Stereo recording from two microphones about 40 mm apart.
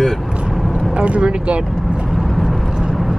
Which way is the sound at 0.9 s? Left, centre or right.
Right.